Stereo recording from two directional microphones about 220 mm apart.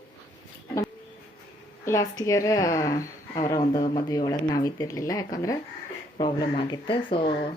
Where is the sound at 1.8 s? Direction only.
15° left (ahead or behind).